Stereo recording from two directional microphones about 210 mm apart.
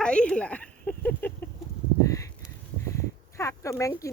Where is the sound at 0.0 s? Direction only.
5° left (ahead or behind).